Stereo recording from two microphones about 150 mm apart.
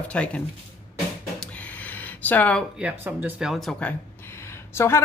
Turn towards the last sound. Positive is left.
turn(degrees=15)  # may be behind; listen again after turning